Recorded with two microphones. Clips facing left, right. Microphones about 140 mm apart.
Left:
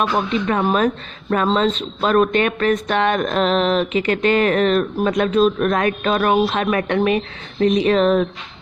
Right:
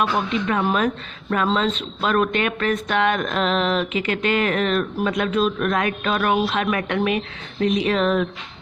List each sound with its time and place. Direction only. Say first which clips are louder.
0.0 s speech: left 2 dB; 35° left (ahead or behind)